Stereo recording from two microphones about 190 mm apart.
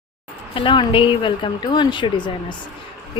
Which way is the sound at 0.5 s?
25° left (ahead or behind).